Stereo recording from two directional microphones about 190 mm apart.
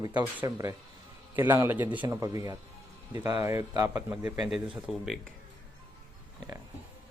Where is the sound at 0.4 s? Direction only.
20° right (ahead or behind).